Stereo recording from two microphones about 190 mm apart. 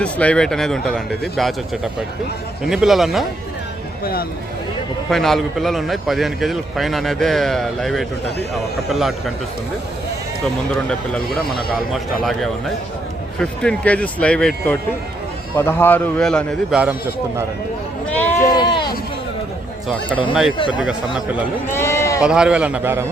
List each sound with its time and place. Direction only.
0.0 s a man's voice: 5° left (ahead or behind)
4.0 s speech: 50° left (ahead or behind)
5.1 s a man's voice: centre (ahead or behind)
10.4 s a man's voice: 5° left (ahead or behind)
18.0 s sheep: 10° left (ahead or behind)
18.5 s sheep: 25° left (ahead or behind)
21.7 s speech: 15° left (ahead or behind)
22.2 s a man's voice: 5° right (ahead or behind)